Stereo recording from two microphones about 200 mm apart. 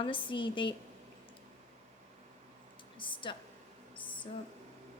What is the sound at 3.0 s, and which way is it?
Speech, 25° left (ahead or behind).